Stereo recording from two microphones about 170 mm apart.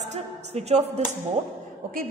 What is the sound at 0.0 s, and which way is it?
Music, 40° right (ahead or behind).